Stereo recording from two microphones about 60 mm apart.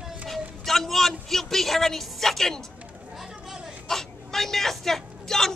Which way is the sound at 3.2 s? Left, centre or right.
Centre.